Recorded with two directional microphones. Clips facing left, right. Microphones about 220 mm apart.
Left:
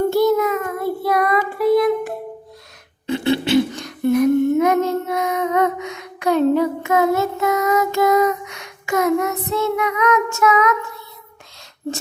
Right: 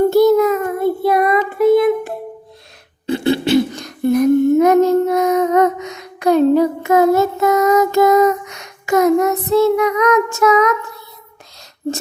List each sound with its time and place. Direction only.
0.1 s child singing: 40° right (ahead or behind)
0.8 s child singing: 25° right (ahead or behind)
3.1 s humming: 35° right (ahead or behind)